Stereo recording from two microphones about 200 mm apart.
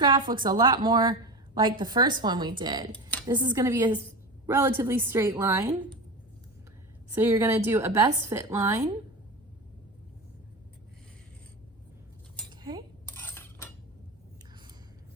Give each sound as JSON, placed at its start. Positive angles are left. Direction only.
{"t": 0.0, "sound": "a woman's voice", "side_deg": -20}
{"t": 7.1, "sound": "a woman's voice", "side_deg": -15}
{"t": 12.5, "sound": "cutlery", "side_deg": -20}
{"t": 13.1, "sound": "a sound", "side_deg": 10}